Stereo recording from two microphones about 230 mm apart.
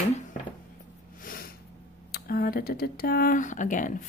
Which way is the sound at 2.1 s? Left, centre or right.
Left.